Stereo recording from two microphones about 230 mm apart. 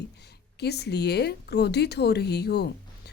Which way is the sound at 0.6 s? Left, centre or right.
Left.